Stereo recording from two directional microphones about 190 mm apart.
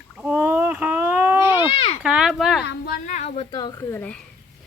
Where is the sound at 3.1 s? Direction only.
40° left (ahead or behind); by 4.2 s 10° left (ahead or behind).